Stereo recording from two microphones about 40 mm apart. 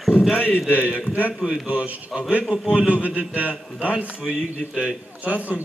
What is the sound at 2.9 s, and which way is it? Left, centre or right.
Speech, right.